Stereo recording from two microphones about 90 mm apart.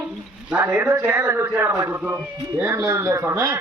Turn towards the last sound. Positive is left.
turn(degrees=-30)  # may be behind; listen again after turning